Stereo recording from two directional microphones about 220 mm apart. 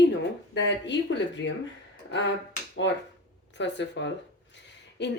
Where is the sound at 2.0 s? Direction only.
55° left (ahead or behind).